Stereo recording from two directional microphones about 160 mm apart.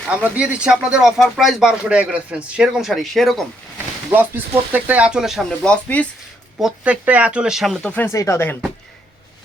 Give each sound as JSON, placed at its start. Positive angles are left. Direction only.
{"t": 0.1, "sound": "speech", "side_deg": -5}
{"t": 4.1, "sound": "speech", "side_deg": -15}
{"t": 6.6, "sound": "speech", "side_deg": -5}